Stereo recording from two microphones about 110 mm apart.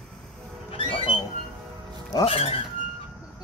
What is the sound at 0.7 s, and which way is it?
Music, 50° left (ahead or behind).